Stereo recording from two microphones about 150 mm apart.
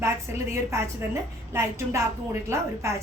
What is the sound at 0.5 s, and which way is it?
A woman's voice, 20° right (ahead or behind).